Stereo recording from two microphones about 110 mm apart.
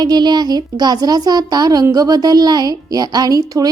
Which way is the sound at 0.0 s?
40° right (ahead or behind).